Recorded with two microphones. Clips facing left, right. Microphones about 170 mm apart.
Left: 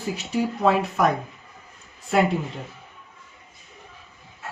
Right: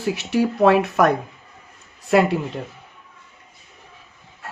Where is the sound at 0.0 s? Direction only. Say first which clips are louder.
Right 5 dB; 75° right (ahead or behind).